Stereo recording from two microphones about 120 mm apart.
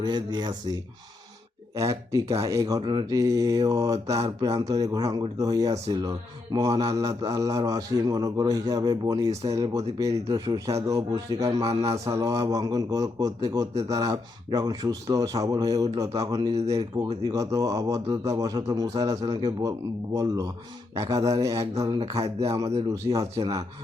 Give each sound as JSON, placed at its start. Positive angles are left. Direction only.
{"t": 0.0, "sound": "speech", "side_deg": -40}
{"t": 1.7, "sound": "speech", "side_deg": -25}